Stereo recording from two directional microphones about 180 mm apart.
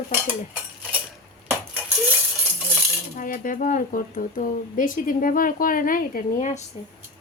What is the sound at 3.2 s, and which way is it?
Speech, 50° left (ahead or behind).